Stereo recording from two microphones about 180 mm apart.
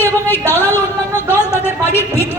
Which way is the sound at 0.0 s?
10° left (ahead or behind).